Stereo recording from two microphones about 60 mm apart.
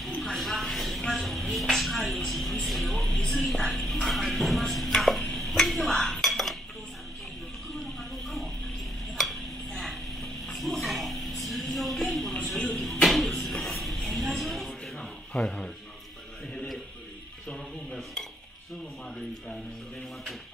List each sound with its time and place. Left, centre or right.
0.2 s a sound: centre
2.1 s speech: centre
3.4 s chopping: centre
7.8 s a sound: centre
15.3 s music: centre
17.5 s music: centre